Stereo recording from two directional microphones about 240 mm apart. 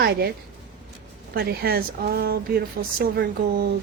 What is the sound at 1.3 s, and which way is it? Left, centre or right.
Speech, right.